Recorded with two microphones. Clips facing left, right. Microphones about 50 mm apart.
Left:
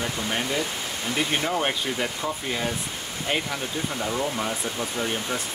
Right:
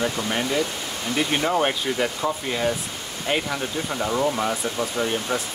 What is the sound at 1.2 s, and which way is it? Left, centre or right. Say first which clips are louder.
Speech: right 4 dB; centre.